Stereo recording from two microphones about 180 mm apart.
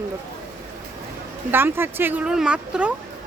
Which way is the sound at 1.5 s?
10° right (ahead or behind).